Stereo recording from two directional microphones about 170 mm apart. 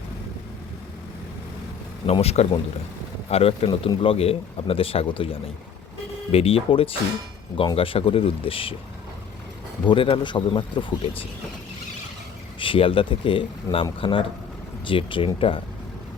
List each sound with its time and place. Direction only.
2.0 s speech: 35° left (ahead or behind)
9.8 s speech: 30° left (ahead or behind)
12.5 s speech: 30° left (ahead or behind)